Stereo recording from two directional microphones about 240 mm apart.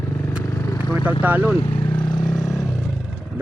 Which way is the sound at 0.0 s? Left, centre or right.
Centre.